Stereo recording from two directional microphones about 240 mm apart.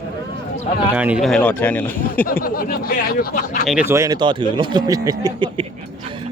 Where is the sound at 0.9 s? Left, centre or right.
Centre.